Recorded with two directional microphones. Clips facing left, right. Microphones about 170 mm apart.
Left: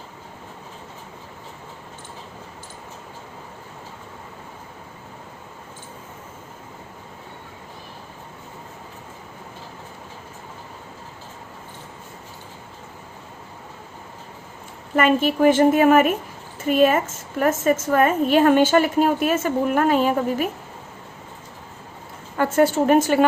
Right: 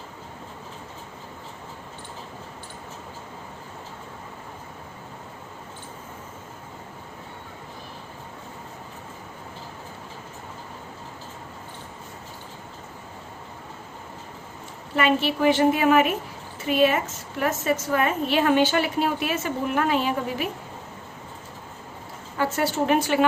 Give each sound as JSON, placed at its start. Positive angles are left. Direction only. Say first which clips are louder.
{"t": 14.9, "sound": "a woman's voice", "louder": "left 4 dB", "side_deg": 45}
{"t": 22.4, "sound": "a woman's voice", "louder": "left 6 dB", "side_deg": 50}